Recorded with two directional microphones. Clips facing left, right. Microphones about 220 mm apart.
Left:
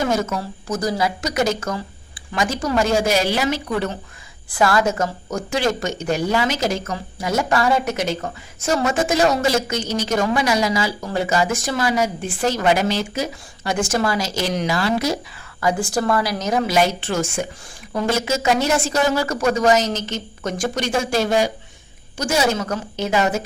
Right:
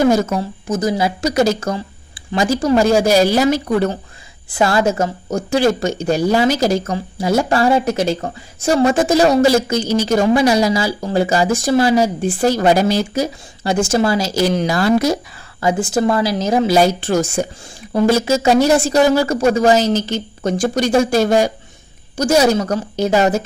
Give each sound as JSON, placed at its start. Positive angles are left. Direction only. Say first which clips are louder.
{"t": 0.1, "sound": "speech", "louder": "right 6 dB", "side_deg": -35}
{"t": 0.7, "sound": "speech", "louder": "right 4 dB", "side_deg": -20}
{"t": 4.5, "sound": "speech", "louder": "right 3 dB", "side_deg": -25}
{"t": 13.7, "sound": "speech", "louder": "right 5 dB", "side_deg": -25}
{"t": 14.8, "sound": "speech", "louder": "right 8 dB", "side_deg": -45}
{"t": 15.6, "sound": "speech", "louder": "right 4 dB", "side_deg": -25}